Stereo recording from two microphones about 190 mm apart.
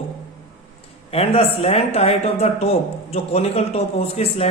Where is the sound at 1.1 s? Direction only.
30° left (ahead or behind).